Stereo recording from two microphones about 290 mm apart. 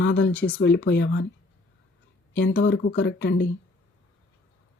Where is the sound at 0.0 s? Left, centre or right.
Left.